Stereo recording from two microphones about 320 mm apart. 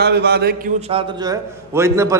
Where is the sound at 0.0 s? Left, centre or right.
Right.